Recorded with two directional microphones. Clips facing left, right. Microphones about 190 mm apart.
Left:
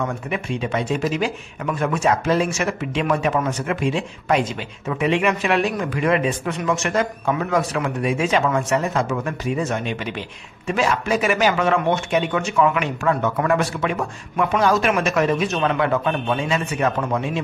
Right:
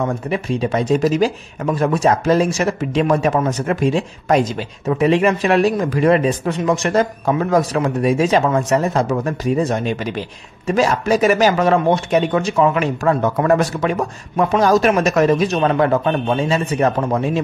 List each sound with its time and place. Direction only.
0.0 s speech: 35° right (ahead or behind)